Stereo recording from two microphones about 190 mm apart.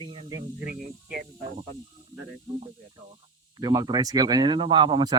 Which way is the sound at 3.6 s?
20° right (ahead or behind).